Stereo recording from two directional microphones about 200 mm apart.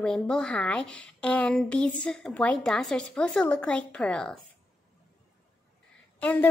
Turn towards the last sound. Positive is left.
turn(degrees=10)  # may be behind; listen again after turning